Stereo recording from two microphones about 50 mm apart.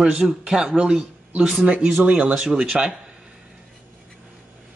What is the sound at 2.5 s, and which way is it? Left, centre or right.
Speech, centre.